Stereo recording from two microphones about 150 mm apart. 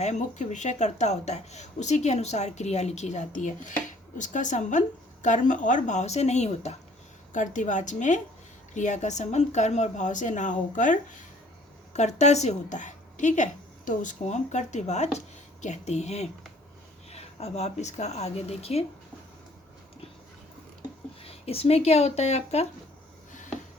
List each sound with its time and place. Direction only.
0.0 s a woman's voice: 55° left (ahead or behind)
11.9 s speech: 50° left (ahead or behind)
21.2 s speech: 40° left (ahead or behind)